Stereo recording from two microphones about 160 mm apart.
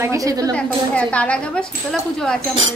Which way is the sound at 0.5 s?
5° left (ahead or behind).